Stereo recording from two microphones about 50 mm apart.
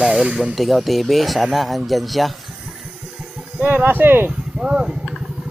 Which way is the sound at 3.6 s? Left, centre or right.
Right.